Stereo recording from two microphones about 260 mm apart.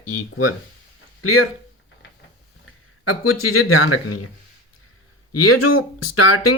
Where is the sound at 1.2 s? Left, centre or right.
Left.